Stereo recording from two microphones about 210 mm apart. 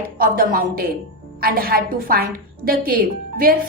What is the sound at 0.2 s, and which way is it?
A woman's voice, 45° right (ahead or behind).